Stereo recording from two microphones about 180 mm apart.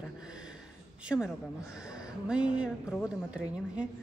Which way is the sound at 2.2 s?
5° right (ahead or behind).